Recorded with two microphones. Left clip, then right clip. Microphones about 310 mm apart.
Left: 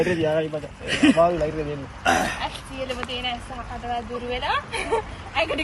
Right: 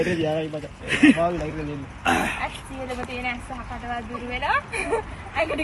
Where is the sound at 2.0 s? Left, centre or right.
Centre.